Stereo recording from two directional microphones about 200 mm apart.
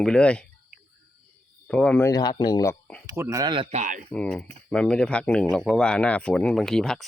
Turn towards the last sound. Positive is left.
turn(degrees=0)  # may be behind; listen again after turning